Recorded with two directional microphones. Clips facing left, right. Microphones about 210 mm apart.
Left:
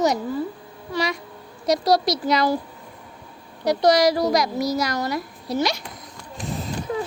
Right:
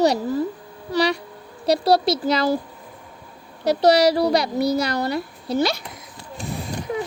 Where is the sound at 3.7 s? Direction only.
30° right (ahead or behind).